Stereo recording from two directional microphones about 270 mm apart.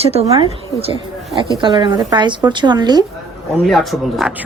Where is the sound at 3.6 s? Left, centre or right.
Centre.